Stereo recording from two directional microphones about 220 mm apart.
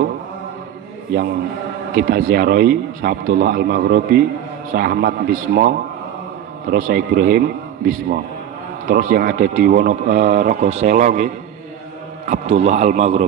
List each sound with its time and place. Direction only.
2.0 s a man's voice: 45° right (ahead or behind)